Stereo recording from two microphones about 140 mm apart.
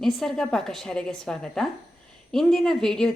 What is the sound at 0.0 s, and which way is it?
A woman's voice, centre (ahead or behind).